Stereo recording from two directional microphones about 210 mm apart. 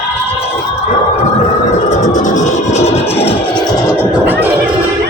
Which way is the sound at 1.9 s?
35° left (ahead or behind).